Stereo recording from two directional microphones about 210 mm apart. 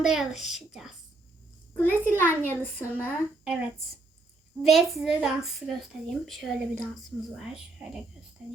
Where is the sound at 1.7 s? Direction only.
10° left (ahead or behind).